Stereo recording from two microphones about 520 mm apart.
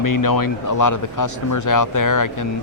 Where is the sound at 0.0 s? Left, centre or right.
Left.